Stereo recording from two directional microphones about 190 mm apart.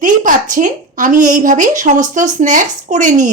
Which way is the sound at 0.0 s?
45° right (ahead or behind).